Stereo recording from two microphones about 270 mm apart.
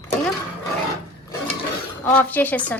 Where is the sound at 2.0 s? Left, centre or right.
Centre.